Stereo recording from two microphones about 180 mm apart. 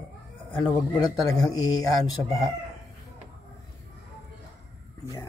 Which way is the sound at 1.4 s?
20° left (ahead or behind).